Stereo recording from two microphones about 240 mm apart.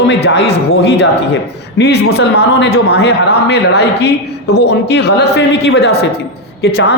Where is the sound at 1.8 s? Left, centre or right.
Left.